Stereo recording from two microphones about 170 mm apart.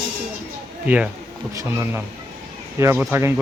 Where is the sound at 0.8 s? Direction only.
5° right (ahead or behind).